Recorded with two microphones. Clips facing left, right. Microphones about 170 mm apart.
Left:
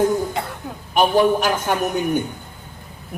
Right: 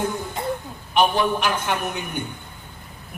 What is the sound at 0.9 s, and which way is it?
Speech, 40° left (ahead or behind).